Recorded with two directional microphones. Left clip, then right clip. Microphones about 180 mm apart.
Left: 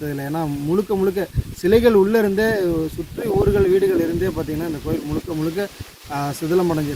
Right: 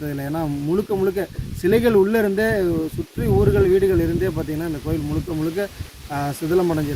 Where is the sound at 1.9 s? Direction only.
20° right (ahead or behind).